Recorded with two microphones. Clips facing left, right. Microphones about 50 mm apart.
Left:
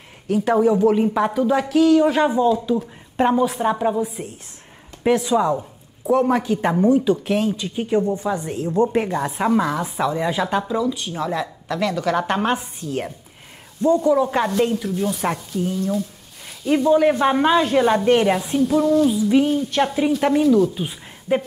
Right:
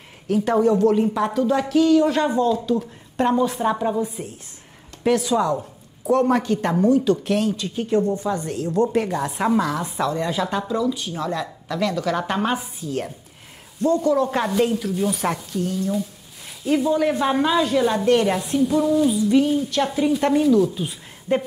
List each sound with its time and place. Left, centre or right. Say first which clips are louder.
0.3 s speech: left 1 dB; centre
5.0 s speech: left 2 dB; centre
5.6 s speech: even; centre
15.8 s speech: left 1 dB; centre
17.2 s speech: left 3 dB; left
18.6 s speech: left 1 dB; centre
19.0 s speech: left 1 dB; centre